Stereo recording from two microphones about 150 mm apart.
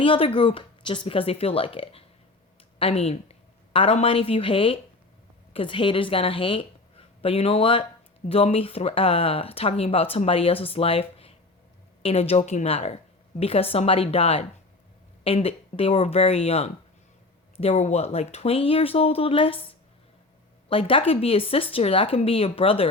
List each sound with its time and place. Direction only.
0.0 s a woman's voice: 35° left (ahead or behind)
20.7 s speech: 35° left (ahead or behind)